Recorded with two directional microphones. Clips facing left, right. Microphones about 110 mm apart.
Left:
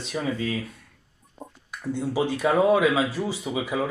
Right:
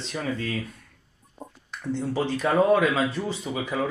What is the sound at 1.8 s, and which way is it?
Speech, 10° left (ahead or behind).